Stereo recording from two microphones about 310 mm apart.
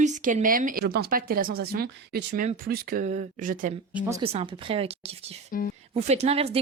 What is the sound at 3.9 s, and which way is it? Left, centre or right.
Speech, centre.